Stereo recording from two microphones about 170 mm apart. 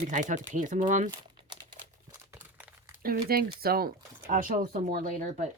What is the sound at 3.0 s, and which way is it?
Speech, 65° right (ahead or behind).